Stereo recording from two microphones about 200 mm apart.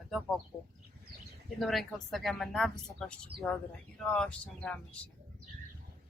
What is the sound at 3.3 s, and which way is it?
Speech, 55° right (ahead or behind).